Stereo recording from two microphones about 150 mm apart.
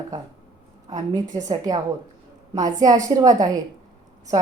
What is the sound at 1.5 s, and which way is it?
A woman's voice, 25° right (ahead or behind).